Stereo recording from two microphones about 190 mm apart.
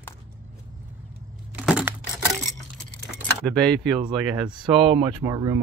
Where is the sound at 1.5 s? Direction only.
5° right (ahead or behind).